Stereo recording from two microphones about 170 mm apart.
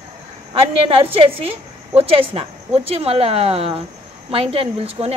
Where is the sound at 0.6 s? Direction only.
35° right (ahead or behind).